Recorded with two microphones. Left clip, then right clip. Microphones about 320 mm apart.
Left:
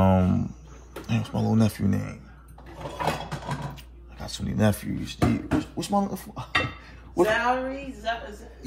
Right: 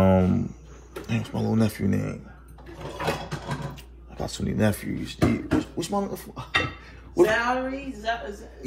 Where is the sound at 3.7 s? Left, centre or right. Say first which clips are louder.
Right 6 dB; centre.